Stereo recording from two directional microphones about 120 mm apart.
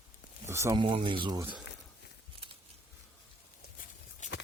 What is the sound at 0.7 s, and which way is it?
Speech, 45° right (ahead or behind).